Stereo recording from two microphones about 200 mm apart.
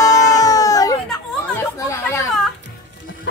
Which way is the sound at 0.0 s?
15° left (ahead or behind).